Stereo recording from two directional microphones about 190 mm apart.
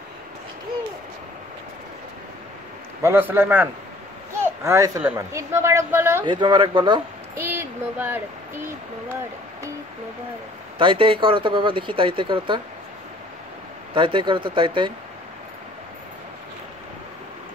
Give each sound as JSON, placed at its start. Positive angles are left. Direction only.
{"t": 3.0, "sound": "speech", "side_deg": -10}
{"t": 4.3, "sound": "a sound", "side_deg": -15}
{"t": 5.0, "sound": "speech", "side_deg": -15}
{"t": 6.2, "sound": "speech", "side_deg": -25}
{"t": 7.4, "sound": "speech", "side_deg": -10}
{"t": 10.8, "sound": "speech", "side_deg": -25}
{"t": 13.9, "sound": "speech", "side_deg": -25}